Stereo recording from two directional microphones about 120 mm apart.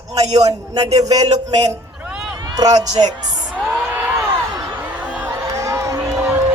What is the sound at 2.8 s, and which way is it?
Speech, 30° right (ahead or behind).